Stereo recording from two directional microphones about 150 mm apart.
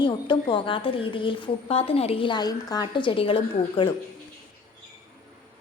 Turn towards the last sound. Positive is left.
turn(degrees=35)  # may be behind; listen again after turning